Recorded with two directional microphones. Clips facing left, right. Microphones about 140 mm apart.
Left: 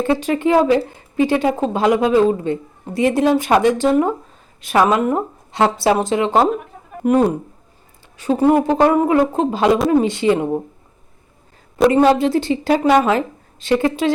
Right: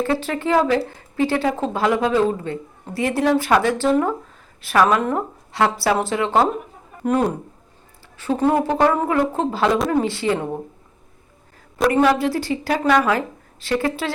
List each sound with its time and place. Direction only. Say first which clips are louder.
0.0 s speech: left 4 dB; 15° left (ahead or behind)
11.9 s speech: left 3 dB; 20° left (ahead or behind)